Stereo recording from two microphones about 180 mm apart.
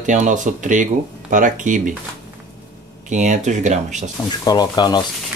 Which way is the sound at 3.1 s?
40° right (ahead or behind).